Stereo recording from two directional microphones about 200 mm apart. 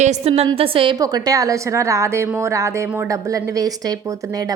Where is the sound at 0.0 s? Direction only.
30° right (ahead or behind).